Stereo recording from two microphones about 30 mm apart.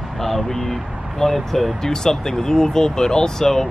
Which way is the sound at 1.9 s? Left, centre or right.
Centre.